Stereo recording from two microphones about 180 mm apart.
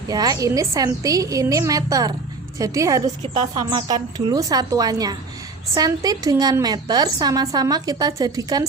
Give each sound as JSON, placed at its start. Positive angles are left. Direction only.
{"t": 0.1, "sound": "a woman's voice", "side_deg": -20}